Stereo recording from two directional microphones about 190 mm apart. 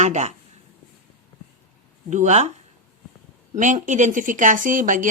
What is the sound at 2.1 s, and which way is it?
Speech, 40° right (ahead or behind).